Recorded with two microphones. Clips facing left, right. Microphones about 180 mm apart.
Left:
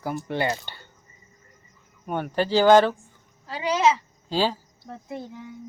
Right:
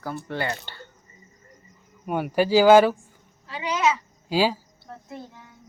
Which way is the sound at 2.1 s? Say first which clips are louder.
Right 3 dB; 10° right (ahead or behind).